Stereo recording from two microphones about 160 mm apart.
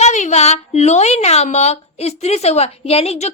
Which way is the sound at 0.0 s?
45° left (ahead or behind).